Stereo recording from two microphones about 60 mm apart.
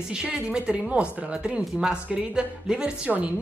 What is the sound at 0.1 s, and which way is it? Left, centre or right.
Speech, centre.